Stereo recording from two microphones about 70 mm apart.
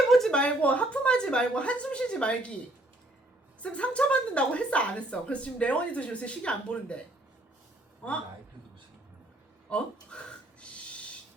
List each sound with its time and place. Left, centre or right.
0.3 s a woman's voice: centre
3.6 s a woman's voice: centre
8.0 s a woman's voice: centre
9.6 s speech: centre
10.6 s a sound: centre